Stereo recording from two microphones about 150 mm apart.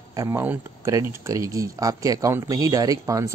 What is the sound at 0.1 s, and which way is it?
Speech, 20° right (ahead or behind).